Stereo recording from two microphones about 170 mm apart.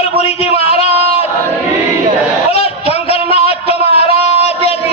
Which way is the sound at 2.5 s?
35° left (ahead or behind).